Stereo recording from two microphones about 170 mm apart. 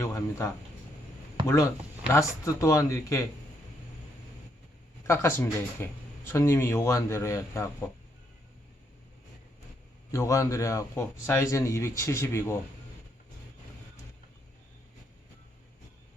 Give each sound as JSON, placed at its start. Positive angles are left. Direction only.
{"t": 0.0, "sound": "speech", "side_deg": 15}
{"t": 1.5, "sound": "speech", "side_deg": 15}
{"t": 5.0, "sound": "speech", "side_deg": 15}
{"t": 10.1, "sound": "speech", "side_deg": 20}